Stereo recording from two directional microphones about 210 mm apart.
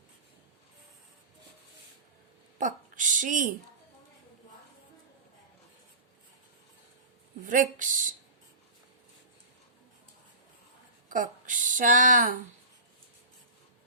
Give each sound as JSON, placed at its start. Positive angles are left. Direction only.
{"t": 2.6, "sound": "a sound", "side_deg": -40}
{"t": 7.4, "sound": "speech", "side_deg": -40}
{"t": 11.1, "sound": "speech", "side_deg": -40}